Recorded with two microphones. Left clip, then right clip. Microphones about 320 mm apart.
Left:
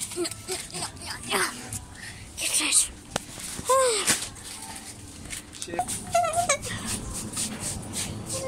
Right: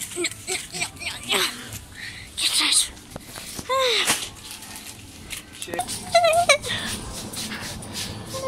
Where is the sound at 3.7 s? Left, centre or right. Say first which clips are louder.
Right 1 dB; centre.